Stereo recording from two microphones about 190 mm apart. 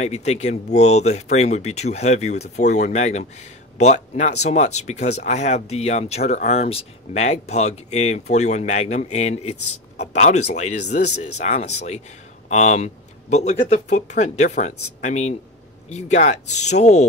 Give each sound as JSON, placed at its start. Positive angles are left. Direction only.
{"t": 0.0, "sound": "speech", "side_deg": 35}